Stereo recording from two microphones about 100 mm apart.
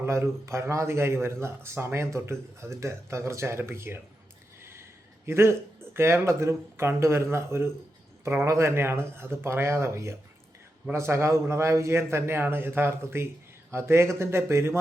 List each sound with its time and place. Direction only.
0.0 s a man's voice: 25° right (ahead or behind)